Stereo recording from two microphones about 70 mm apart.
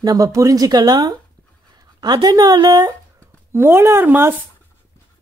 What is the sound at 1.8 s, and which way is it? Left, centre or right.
Speech, right.